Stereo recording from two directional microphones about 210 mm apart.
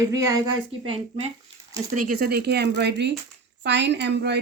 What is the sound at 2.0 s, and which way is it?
A woman's voice, 40° right (ahead or behind).